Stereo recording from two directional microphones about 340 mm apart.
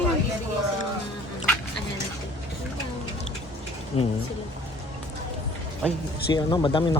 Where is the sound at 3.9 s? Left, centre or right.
Centre.